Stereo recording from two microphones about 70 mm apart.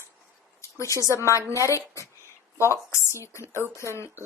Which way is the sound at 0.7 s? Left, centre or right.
Left.